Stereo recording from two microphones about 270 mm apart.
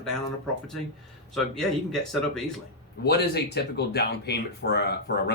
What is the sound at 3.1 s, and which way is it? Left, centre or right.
Speech, left.